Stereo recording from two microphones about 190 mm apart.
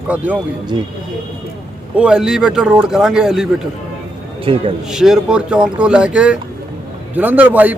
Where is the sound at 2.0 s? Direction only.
5° right (ahead or behind).